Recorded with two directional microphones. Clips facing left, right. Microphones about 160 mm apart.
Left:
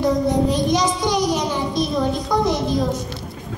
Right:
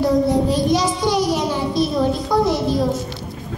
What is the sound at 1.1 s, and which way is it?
Child singing, 20° left (ahead or behind).